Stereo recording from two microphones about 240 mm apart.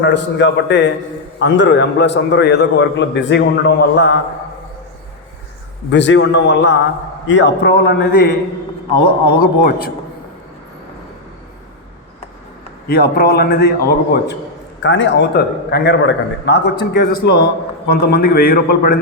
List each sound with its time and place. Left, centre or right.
0.0 s a man's voice: left
5.9 s a man's voice: left
9.4 s a man's voice: left
12.9 s a man's voice: left